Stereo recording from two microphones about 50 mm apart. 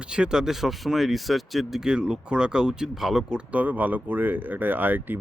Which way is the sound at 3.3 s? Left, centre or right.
Right.